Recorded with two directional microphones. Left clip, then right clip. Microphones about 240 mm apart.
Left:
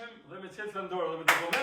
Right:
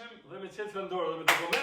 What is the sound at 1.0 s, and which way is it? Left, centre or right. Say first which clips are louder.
Speech: left 1 dB; centre.